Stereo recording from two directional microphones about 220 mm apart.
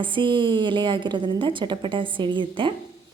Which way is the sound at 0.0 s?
20° right (ahead or behind).